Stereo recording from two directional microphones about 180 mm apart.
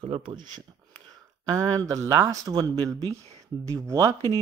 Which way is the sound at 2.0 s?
20° right (ahead or behind).